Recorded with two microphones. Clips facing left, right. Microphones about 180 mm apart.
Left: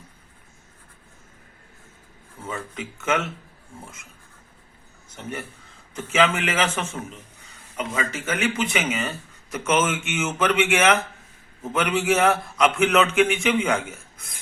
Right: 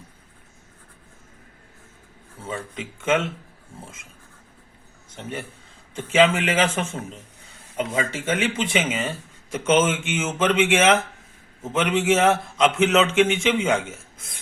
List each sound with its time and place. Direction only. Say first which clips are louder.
2.5 s speech: right 1 dB; 25° right (ahead or behind)
5.9 s speech: right 3 dB; 30° right (ahead or behind)